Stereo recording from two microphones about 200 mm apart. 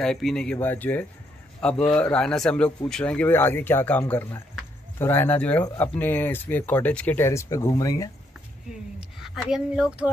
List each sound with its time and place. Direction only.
0.0 s speech: centre (ahead or behind)
9.2 s speech: centre (ahead or behind)